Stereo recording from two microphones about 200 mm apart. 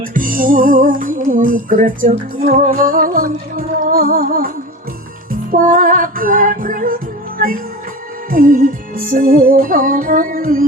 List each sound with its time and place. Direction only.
0.0 s music: 45° right (ahead or behind)